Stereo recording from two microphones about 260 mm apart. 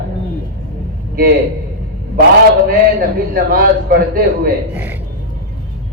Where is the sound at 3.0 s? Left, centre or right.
Right.